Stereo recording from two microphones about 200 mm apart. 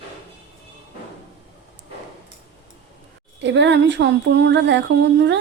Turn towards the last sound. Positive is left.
turn(degrees=-60)  # may be behind; listen again after turning